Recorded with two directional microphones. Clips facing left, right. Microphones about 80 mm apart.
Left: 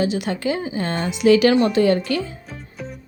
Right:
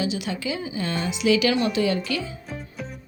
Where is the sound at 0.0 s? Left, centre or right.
Left.